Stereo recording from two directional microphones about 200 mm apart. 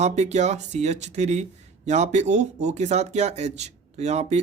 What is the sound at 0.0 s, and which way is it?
Speech, 35° right (ahead or behind).